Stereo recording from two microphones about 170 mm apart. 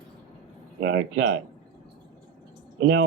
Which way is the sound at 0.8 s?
90° right.